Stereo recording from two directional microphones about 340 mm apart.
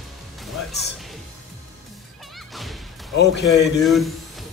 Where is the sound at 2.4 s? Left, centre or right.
Centre.